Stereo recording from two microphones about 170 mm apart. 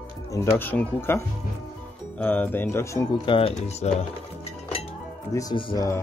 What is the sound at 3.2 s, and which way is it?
Speech, 30° left (ahead or behind).